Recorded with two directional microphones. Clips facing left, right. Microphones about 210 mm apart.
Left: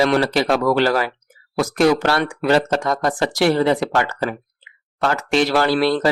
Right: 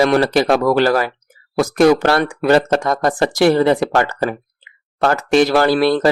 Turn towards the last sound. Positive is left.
turn(degrees=-45)  # may be behind; listen again after turning